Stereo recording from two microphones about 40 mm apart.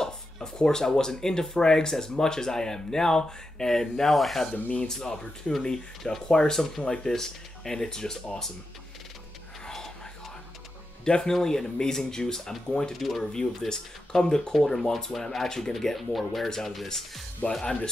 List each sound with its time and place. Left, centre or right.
0.0 s speech: centre
4.9 s speech: centre
11.1 s speech: centre
12.9 s speech: centre
13.2 s speech: centre